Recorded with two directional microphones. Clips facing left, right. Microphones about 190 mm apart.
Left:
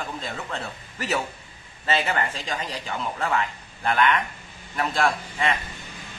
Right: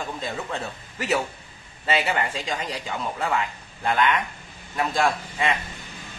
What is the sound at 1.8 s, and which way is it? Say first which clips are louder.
Speech: right 1 dB; 15° right (ahead or behind).